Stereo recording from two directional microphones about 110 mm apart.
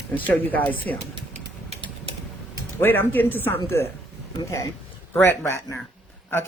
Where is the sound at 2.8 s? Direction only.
20° left (ahead or behind).